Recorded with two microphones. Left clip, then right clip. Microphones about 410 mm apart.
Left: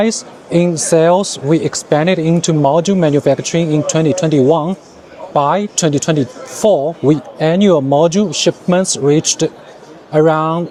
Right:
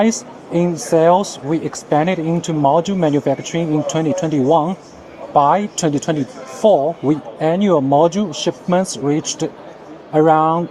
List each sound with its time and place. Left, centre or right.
0.0 s speech: left